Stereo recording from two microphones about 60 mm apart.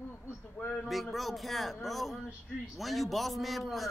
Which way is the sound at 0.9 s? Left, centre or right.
Centre.